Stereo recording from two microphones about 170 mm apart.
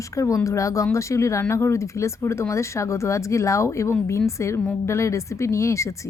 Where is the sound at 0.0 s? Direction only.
20° left (ahead or behind).